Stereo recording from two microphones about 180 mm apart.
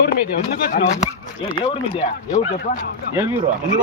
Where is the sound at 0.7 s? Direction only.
45° left (ahead or behind).